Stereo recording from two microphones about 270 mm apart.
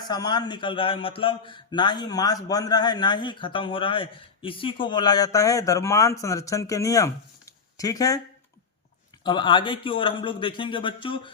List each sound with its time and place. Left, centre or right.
0.0 s a man's voice: centre
9.2 s a man's voice: centre